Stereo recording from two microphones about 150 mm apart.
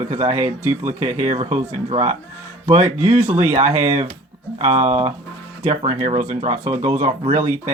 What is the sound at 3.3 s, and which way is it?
Speech, 15° right (ahead or behind).